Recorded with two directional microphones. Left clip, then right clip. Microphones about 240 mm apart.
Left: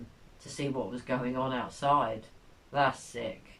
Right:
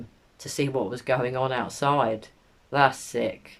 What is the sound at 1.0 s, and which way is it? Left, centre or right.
Speech, right.